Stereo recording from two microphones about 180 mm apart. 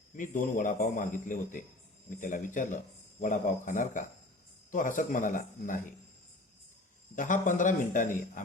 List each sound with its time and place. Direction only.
0.2 s a man's voice: 45° left (ahead or behind)
7.2 s a man's voice: 45° left (ahead or behind)